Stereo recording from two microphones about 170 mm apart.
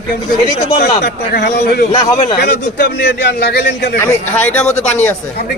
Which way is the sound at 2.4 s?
75° left (ahead or behind).